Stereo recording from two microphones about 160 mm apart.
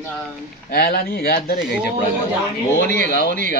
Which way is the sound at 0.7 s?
75° left (ahead or behind).